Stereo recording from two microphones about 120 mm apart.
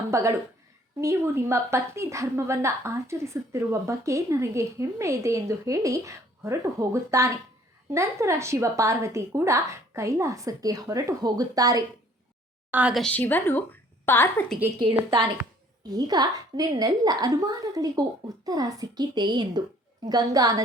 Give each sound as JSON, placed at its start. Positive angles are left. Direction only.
{"t": 0.1, "sound": "a woman's voice", "side_deg": -25}
{"t": 12.9, "sound": "a woman's voice", "side_deg": 5}
{"t": 14.8, "sound": "a woman's voice", "side_deg": -45}
{"t": 15.8, "sound": "a woman's voice", "side_deg": -35}